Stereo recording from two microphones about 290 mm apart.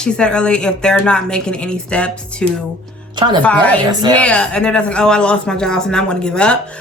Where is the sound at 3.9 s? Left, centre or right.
Centre.